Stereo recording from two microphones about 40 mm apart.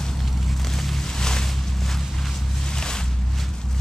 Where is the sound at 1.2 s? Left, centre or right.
Centre.